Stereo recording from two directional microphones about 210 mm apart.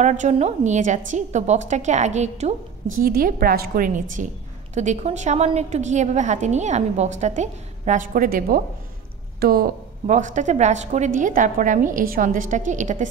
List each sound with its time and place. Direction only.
0.0 s a woman's voice: 35° right (ahead or behind)
3.0 s a woman's voice: 45° right (ahead or behind)